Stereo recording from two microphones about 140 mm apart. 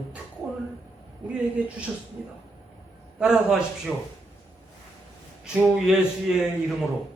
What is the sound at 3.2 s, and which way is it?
Speech, 5° right (ahead or behind).